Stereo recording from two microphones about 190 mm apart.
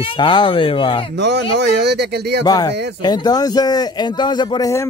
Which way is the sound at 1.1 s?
65° right (ahead or behind).